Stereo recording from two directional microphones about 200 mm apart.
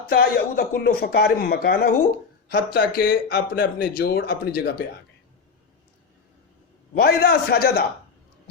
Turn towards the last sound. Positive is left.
turn(degrees=55)  # may be behind; listen again after turning